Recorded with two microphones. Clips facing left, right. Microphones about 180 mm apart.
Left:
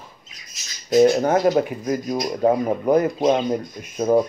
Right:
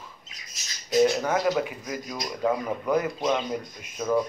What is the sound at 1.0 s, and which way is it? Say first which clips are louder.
Speech: left 7 dB; 45° left (ahead or behind).